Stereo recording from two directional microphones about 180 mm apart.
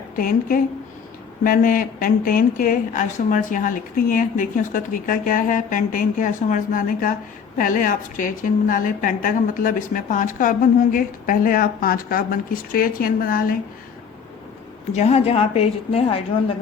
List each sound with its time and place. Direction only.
0.2 s a woman's voice: 50° left (ahead or behind)
14.9 s a woman's voice: 35° left (ahead or behind)